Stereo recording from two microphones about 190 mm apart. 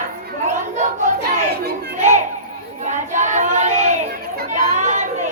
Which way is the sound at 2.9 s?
40° right (ahead or behind).